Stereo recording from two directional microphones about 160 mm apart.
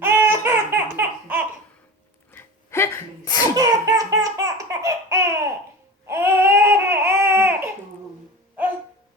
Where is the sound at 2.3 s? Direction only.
15° left (ahead or behind).